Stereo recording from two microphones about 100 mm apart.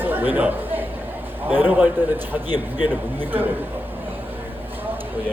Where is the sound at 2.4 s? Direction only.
45° left (ahead or behind).